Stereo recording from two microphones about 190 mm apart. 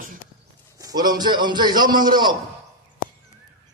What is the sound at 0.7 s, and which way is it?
Speech, 20° right (ahead or behind).